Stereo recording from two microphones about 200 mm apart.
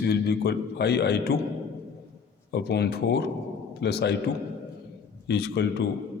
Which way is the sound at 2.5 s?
55° left (ahead or behind).